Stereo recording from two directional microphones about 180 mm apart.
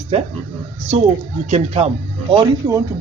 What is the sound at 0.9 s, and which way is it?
Speech, 35° right (ahead or behind).